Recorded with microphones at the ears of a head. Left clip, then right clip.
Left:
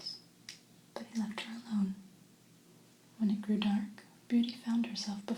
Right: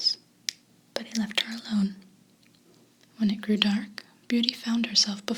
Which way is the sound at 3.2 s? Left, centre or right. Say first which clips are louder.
Right 9 dB; right.